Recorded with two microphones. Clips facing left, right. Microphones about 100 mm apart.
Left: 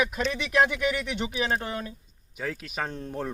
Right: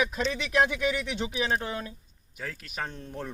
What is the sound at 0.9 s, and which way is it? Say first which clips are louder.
Speech: left 1 dB; 15° right (ahead or behind).